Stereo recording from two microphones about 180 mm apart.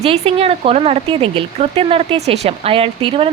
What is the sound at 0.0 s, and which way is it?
Speech, 35° right (ahead or behind).